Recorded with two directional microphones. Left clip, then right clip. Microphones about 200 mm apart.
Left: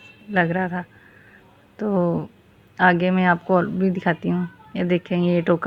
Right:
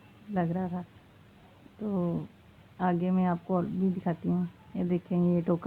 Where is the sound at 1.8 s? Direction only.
35° left (ahead or behind).